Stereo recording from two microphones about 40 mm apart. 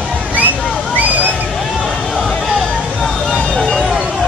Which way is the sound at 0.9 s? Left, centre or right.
Right.